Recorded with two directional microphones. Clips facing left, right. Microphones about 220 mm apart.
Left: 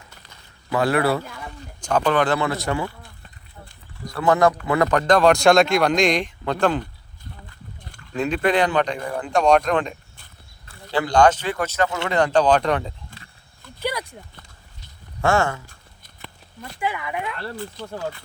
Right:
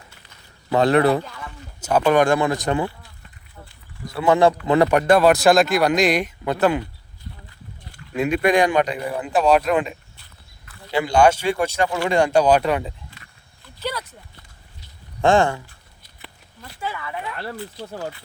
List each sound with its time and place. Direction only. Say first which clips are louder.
0.7 s speech: right 4 dB; 25° right (ahead or behind)
1.8 s speech: right 3 dB; 10° right (ahead or behind)
4.6 s speech: right 3 dB; 15° right (ahead or behind)
8.1 s speech: right 2 dB; 10° right (ahead or behind)
10.9 s speech: right 1 dB; 10° right (ahead or behind)
13.1 s a sound: left 3 dB; 45° left (ahead or behind)
13.7 s a sound: left 2 dB; 15° left (ahead or behind)
15.2 s speech: right 3 dB; 15° right (ahead or behind)
16.8 s speech: left 3 dB; 15° left (ahead or behind)